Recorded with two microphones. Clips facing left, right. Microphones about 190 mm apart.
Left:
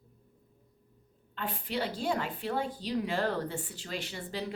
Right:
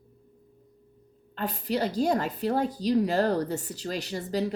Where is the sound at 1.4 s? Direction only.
40° right (ahead or behind).